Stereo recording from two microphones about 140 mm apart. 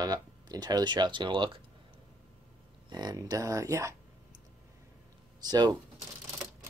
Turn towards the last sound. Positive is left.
turn(degrees=-30)  # may be behind; listen again after turning